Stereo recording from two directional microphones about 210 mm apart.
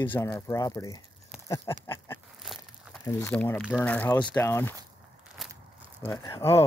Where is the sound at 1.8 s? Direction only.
15° left (ahead or behind).